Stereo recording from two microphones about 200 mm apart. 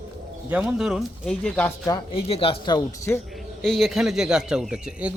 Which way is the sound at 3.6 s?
Centre (ahead or behind).